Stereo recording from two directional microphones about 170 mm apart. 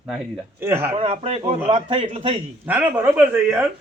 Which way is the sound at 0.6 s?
15° right (ahead or behind).